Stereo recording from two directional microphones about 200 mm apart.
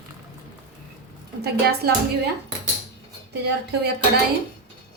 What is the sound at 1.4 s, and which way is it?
Speech, 55° right (ahead or behind).